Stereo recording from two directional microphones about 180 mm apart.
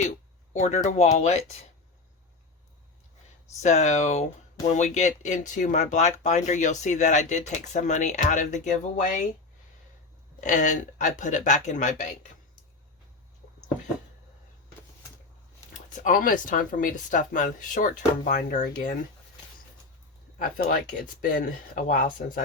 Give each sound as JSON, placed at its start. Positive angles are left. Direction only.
{"t": 0.6, "sound": "speech", "side_deg": 40}
{"t": 3.6, "sound": "speech", "side_deg": 40}
{"t": 10.4, "sound": "speech", "side_deg": 45}
{"t": 15.9, "sound": "speech", "side_deg": 45}
{"t": 20.4, "sound": "speech", "side_deg": 50}